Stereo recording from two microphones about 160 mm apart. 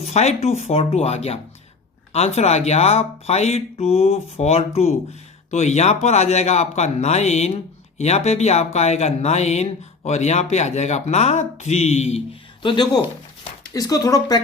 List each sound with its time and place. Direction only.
0.0 s speech: 45° left (ahead or behind); by 14.3 s 20° left (ahead or behind)